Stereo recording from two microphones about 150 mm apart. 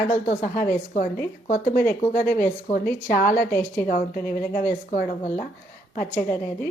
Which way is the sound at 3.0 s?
65° left (ahead or behind).